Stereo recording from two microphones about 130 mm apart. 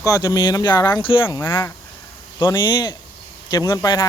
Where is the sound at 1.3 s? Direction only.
20° left (ahead or behind).